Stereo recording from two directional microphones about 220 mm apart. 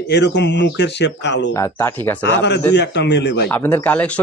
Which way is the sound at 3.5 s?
10° left (ahead or behind).